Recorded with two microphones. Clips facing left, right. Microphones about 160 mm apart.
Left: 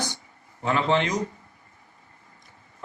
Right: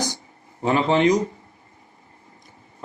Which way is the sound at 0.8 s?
15° right (ahead or behind).